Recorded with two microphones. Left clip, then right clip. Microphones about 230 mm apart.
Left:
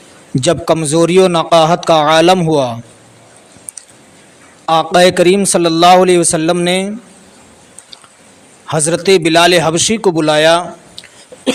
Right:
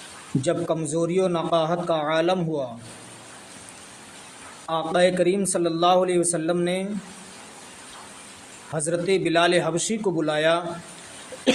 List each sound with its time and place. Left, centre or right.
0.4 s a man's voice: left
4.6 s a man's voice: left
8.7 s a man's voice: left